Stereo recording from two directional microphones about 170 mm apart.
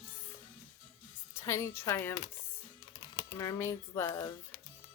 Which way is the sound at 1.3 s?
15° left (ahead or behind).